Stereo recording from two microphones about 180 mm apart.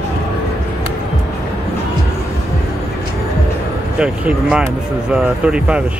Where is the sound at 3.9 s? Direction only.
5° right (ahead or behind).